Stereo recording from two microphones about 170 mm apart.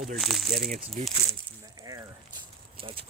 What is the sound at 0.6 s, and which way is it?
Speech, 50° right (ahead or behind).